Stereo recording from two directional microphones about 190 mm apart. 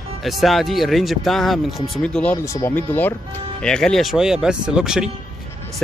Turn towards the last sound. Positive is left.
turn(degrees=-5)  # may be behind; listen again after turning